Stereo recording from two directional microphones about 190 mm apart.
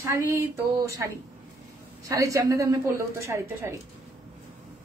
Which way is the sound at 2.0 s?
15° right (ahead or behind).